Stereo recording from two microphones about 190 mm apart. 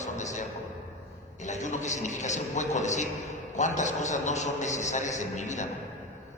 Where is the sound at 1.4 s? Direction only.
40° left (ahead or behind).